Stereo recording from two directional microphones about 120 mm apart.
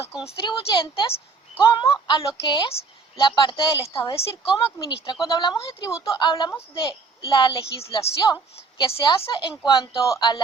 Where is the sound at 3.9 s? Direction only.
25° left (ahead or behind).